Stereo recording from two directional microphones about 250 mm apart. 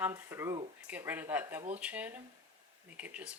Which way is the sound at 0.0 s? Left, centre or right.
Centre.